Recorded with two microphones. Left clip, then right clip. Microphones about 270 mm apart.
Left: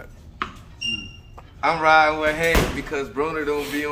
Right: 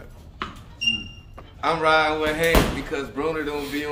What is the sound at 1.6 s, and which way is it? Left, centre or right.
Speech, centre.